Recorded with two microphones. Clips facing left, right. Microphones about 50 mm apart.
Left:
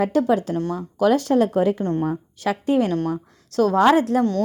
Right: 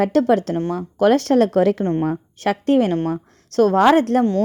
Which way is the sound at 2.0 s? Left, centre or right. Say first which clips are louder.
Right 3 dB; right.